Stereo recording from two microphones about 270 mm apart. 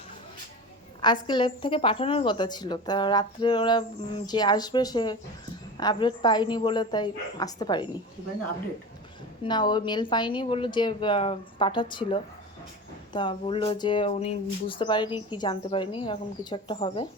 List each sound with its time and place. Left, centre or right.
1.0 s a woman's voice: centre
9.4 s a woman's voice: centre